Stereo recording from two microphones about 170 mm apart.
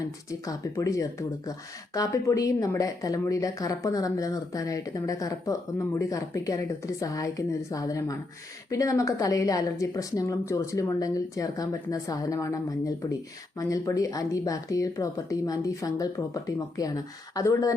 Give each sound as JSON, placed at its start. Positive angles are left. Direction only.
{"t": 0.0, "sound": "speech", "side_deg": 20}